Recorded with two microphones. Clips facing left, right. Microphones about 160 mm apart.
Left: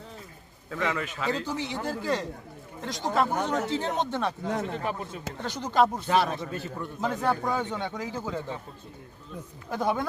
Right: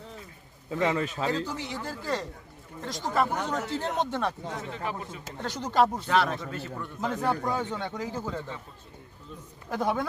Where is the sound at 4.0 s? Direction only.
10° right (ahead or behind).